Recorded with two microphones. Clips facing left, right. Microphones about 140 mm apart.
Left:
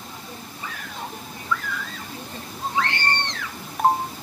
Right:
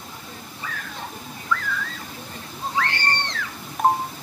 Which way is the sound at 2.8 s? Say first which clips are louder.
Even; 20° left (ahead or behind).